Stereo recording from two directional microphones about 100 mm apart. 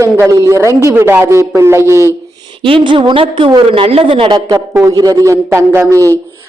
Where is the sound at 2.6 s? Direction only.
55° right (ahead or behind).